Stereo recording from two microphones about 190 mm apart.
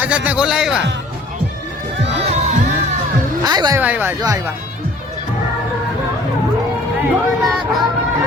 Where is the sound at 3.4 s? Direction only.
20° right (ahead or behind).